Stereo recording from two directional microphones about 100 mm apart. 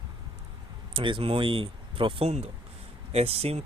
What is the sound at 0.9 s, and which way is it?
Speech, 55° right (ahead or behind).